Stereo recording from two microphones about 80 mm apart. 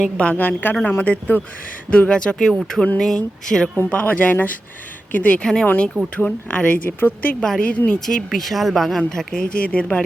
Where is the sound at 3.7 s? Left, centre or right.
Centre.